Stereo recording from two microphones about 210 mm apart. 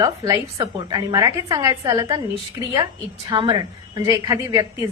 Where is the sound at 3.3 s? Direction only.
20° right (ahead or behind).